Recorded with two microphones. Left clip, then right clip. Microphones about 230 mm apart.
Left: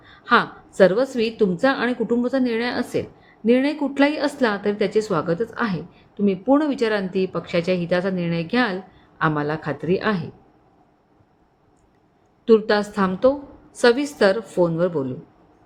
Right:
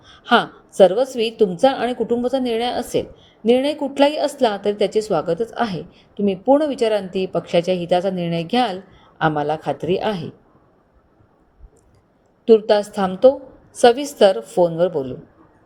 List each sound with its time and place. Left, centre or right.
0.0 s a woman's voice: centre
12.5 s a woman's voice: centre